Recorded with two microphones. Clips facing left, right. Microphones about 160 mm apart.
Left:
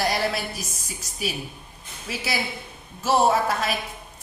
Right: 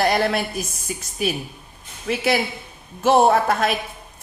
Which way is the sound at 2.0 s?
55° right (ahead or behind).